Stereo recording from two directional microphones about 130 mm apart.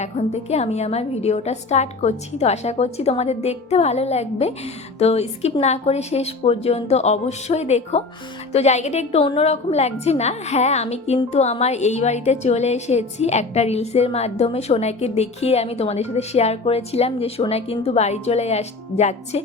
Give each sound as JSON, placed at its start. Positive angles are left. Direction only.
{"t": 0.0, "sound": "a woman's voice", "side_deg": 55}